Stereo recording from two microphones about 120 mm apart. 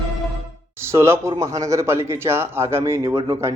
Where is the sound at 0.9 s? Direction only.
20° right (ahead or behind).